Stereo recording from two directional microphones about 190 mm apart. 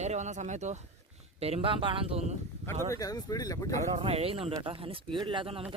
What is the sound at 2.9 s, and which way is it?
Speech, 20° left (ahead or behind).